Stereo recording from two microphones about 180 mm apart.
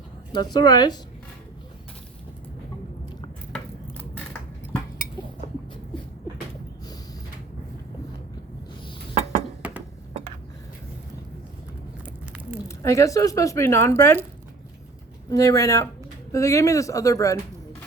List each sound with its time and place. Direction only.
0.3 s a woman's voice: 25° left (ahead or behind)
12.6 s speech: 15° left (ahead or behind)
15.3 s a woman's voice: 20° left (ahead or behind)